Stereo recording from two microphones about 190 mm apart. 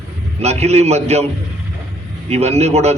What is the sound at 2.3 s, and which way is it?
Speech, 35° right (ahead or behind).